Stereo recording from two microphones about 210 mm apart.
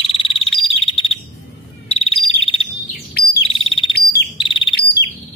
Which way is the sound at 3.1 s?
50° left (ahead or behind).